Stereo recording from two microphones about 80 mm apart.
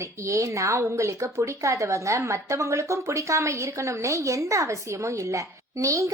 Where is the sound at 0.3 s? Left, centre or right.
Right.